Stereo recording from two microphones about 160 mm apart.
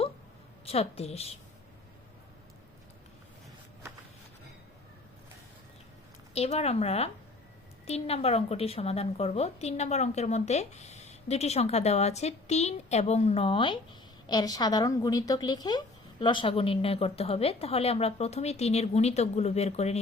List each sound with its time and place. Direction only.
0.6 s speech: 40° left (ahead or behind)
6.3 s a woman's voice: 40° left (ahead or behind)